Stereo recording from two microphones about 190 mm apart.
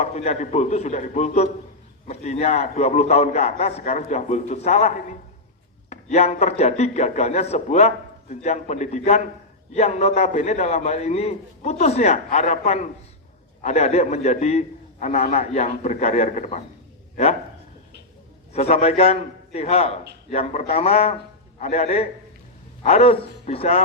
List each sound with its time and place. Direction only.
0.0 s a man's voice: 35° left (ahead or behind)
18.5 s a man's voice: 35° left (ahead or behind)